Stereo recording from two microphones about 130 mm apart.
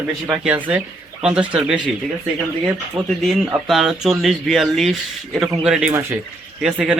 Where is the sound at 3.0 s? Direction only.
5° right (ahead or behind).